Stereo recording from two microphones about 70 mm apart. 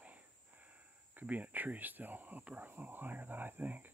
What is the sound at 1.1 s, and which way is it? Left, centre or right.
Speech, right.